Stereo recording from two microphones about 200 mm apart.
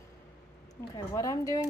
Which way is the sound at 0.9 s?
15° left (ahead or behind).